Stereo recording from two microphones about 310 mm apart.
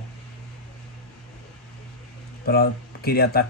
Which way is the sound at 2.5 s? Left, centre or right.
Left.